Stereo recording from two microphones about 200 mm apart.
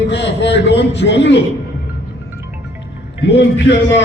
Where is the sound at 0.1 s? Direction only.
60° left (ahead or behind).